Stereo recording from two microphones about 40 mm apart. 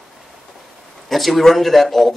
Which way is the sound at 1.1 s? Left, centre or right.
Centre.